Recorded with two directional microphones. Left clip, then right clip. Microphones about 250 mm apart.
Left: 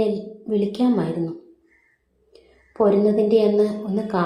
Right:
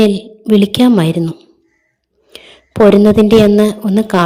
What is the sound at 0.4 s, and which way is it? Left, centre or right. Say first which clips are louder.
Speech: right 11 dB; right.